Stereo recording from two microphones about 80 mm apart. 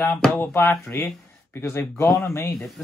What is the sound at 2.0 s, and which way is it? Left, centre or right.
Speech, left.